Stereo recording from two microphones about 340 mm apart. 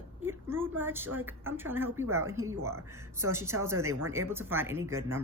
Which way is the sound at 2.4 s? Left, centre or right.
Right.